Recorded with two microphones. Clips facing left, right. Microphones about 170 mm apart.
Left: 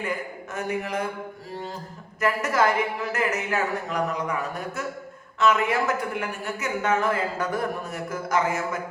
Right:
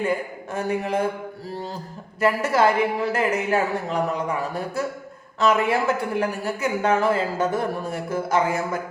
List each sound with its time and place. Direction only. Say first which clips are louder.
0.0 s speech: right 6 dB; 30° right (ahead or behind)
2.2 s speech: right 3 dB; 30° right (ahead or behind)